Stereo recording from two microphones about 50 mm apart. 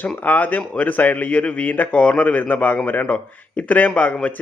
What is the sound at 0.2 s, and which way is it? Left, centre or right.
Speech, left.